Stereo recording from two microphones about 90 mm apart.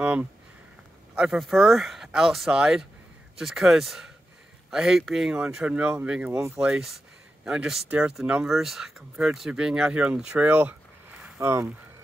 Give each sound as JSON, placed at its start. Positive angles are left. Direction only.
{"t": 0.0, "sound": "speech", "side_deg": -15}
{"t": 11.3, "sound": "speech", "side_deg": -30}